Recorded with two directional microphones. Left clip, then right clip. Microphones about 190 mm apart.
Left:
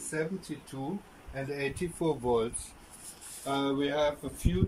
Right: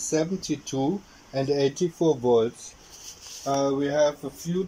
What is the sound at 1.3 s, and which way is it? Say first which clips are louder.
Speech: right 11 dB; 30° right (ahead or behind).